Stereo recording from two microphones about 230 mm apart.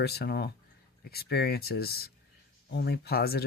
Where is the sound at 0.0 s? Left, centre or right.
Left.